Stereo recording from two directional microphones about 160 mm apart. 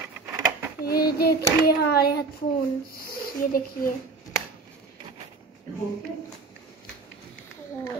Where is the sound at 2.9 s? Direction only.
65° left (ahead or behind).